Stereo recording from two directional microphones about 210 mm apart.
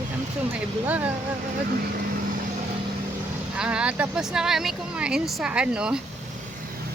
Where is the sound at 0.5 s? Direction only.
5° right (ahead or behind).